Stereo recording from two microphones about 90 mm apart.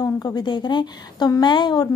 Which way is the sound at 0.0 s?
45° left (ahead or behind).